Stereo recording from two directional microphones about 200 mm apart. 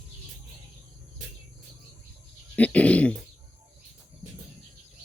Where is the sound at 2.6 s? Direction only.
5° left (ahead or behind).